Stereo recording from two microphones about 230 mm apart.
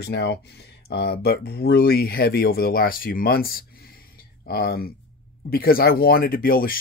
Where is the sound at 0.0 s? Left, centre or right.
Left.